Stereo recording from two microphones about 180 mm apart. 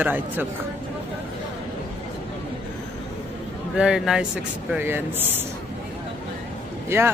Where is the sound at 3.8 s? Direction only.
5° right (ahead or behind).